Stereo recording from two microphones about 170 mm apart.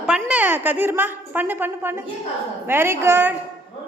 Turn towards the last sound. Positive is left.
turn(degrees=-15)  # may be behind; listen again after turning